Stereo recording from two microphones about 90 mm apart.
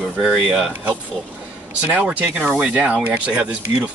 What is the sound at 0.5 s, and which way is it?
Speech, 10° right (ahead or behind).